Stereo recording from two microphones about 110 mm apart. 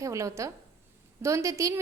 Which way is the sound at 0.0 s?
30° right (ahead or behind).